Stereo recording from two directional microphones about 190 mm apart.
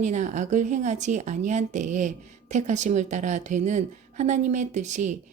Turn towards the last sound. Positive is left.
turn(degrees=-40)  # may be behind; listen again after turning